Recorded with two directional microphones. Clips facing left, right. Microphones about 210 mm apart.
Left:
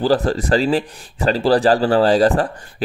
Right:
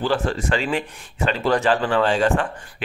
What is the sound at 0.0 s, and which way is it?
Speech, 35° left (ahead or behind).